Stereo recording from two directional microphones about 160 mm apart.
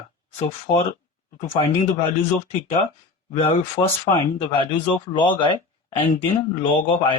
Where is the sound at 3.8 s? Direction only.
25° left (ahead or behind).